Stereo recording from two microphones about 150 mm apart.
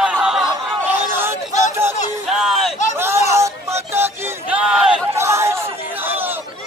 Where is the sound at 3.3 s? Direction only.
20° right (ahead or behind).